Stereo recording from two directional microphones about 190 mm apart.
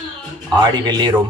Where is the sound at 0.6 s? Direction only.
20° right (ahead or behind).